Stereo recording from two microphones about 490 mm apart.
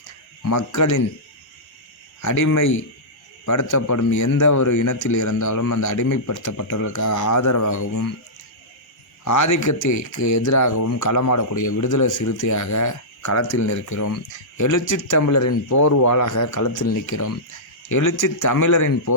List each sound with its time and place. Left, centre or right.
0.4 s speech: left
2.2 s speech: left
9.2 s speech: left